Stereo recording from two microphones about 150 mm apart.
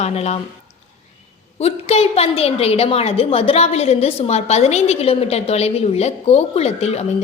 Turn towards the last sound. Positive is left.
turn(degrees=45)  # may be behind; listen again after turning